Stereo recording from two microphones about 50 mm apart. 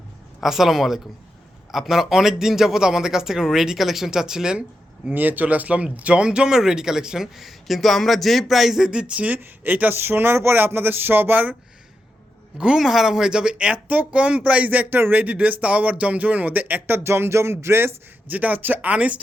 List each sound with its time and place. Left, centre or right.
0.4 s speech: centre
5.1 s speech: right; by 8.9 s centre
8.9 s speech: centre
9.2 s speech: right
9.9 s a sound: right
10.6 s a sound: right
12.5 s speech: centre
12.8 s speech: centre; by 14.8 s right
14.8 s a sound: right
15.2 s speech: right
18.3 s speech: right